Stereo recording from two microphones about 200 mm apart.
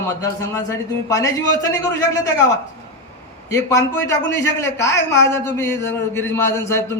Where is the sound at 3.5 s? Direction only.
15° left (ahead or behind).